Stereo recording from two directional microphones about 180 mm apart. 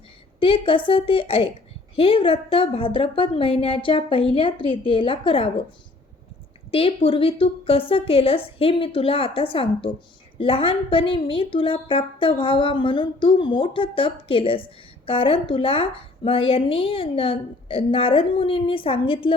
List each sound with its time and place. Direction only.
0.3 s a woman's voice: 30° left (ahead or behind)
6.7 s a woman's voice: 30° left (ahead or behind)